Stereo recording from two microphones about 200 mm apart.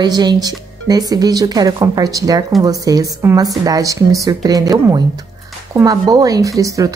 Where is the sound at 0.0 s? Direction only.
20° right (ahead or behind).